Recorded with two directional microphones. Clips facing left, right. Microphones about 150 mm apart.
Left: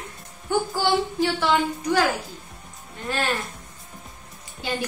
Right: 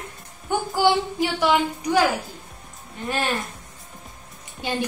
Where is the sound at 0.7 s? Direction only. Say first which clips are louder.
Right 2 dB; 15° right (ahead or behind).